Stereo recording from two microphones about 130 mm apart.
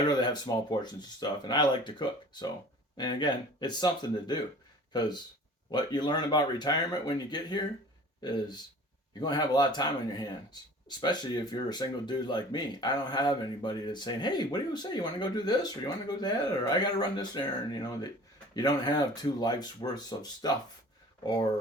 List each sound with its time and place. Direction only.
0.1 s speech: 35° left (ahead or behind)